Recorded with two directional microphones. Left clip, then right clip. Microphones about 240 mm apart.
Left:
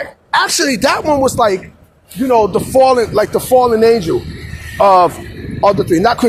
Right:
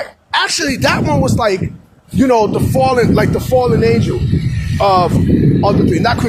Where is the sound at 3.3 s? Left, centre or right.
Left.